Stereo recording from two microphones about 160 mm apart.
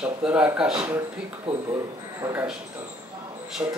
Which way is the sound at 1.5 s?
40° right (ahead or behind).